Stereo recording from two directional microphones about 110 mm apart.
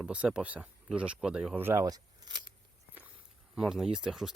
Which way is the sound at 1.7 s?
35° right (ahead or behind).